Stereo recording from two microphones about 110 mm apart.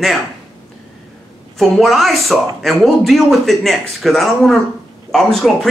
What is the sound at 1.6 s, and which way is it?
Speech, centre (ahead or behind).